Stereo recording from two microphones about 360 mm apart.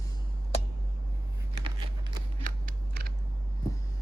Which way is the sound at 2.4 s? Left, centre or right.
Right.